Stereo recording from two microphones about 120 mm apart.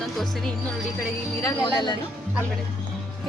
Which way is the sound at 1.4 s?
30° left (ahead or behind).